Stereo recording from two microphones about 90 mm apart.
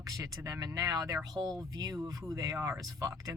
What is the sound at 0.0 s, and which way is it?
Speech, 40° right (ahead or behind).